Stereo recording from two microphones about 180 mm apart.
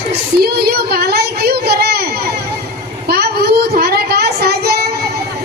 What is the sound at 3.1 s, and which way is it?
Child singing, 60° right (ahead or behind).